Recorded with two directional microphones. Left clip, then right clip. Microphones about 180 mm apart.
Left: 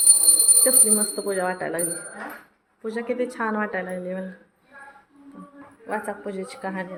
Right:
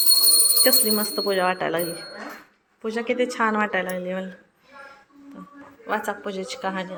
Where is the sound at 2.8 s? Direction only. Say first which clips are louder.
Right 3 dB; 5° right (ahead or behind).